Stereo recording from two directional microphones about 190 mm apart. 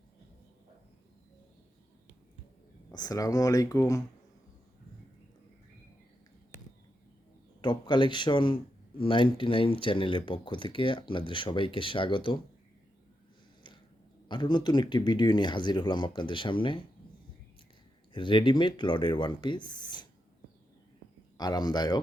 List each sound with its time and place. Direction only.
2.9 s speech: 20° left (ahead or behind)
7.6 s speech: 25° left (ahead or behind)
14.3 s speech: 25° left (ahead or behind)
18.1 s speech: 25° left (ahead or behind)
21.3 s speech: 20° left (ahead or behind)